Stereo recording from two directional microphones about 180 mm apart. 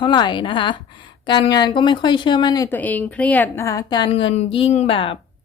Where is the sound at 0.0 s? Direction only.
25° left (ahead or behind).